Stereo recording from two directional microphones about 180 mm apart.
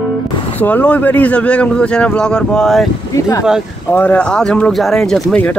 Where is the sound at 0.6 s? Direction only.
10° left (ahead or behind).